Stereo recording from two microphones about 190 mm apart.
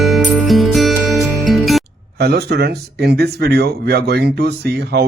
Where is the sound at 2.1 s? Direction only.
55° right (ahead or behind).